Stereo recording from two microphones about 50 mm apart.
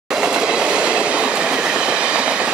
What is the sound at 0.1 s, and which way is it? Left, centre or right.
Train, centre.